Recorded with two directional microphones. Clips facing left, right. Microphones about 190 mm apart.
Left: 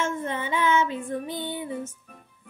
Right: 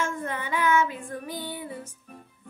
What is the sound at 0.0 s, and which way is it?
Music, 25° left (ahead or behind).